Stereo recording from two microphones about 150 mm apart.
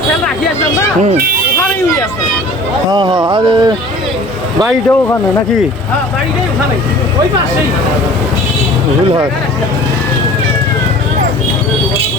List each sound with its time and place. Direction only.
1.1 s speech: 80° right
2.9 s speech: 30° right (ahead or behind)
4.9 s speech: 15° left (ahead or behind)